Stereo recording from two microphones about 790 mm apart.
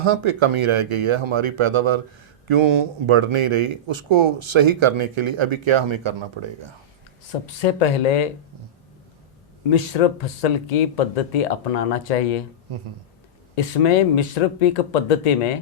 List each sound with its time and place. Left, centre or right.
0.0 s speech: right
7.4 s speech: left
9.6 s speech: left
13.6 s speech: left